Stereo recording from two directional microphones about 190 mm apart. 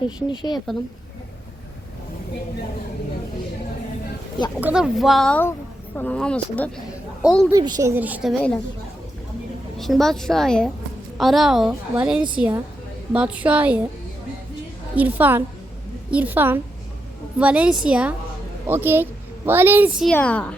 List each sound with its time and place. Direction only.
0.3 s speech: 25° left (ahead or behind)
4.6 s a woman's voice: 5° right (ahead or behind)
7.5 s a woman's voice: 15° right (ahead or behind); by 8.5 s centre (ahead or behind)
9.7 s a woman's voice: centre (ahead or behind)
14.9 s a woman's voice: 10° right (ahead or behind)
20.1 s speech: 5° left (ahead or behind)